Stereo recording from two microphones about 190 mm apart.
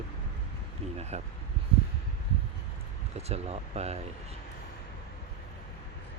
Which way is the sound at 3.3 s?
35° right (ahead or behind).